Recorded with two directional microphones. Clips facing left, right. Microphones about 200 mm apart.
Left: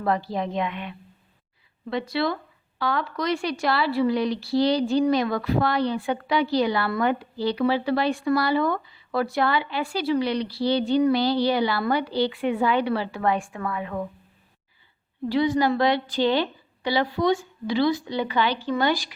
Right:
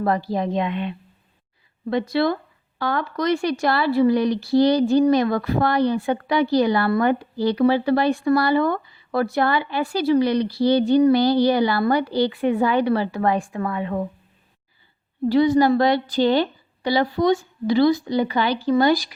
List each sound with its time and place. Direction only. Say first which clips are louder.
0.0 s a woman's voice: right 3 dB; 40° right (ahead or behind)
1.9 s a woman's voice: right 5 dB; 45° right (ahead or behind); by 14.0 s 30° right (ahead or behind)
15.3 s a woman's voice: right 5 dB; 40° right (ahead or behind)